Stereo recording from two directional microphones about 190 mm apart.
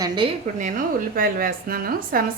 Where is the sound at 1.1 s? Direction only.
50° right (ahead or behind).